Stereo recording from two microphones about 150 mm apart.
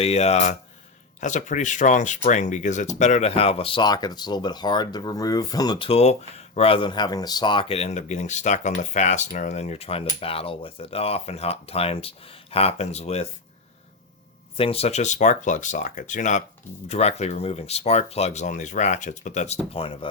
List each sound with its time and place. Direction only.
0.0 s speech: 45° left (ahead or behind); by 5.9 s 30° left (ahead or behind)
5.9 s speech: 45° left (ahead or behind)
14.5 s speech: 40° left (ahead or behind)
19.7 s speech: 35° left (ahead or behind)